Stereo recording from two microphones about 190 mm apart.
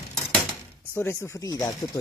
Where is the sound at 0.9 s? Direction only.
10° left (ahead or behind).